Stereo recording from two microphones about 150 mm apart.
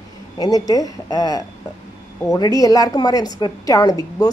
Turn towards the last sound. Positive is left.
turn(degrees=25)  # may be behind; listen again after turning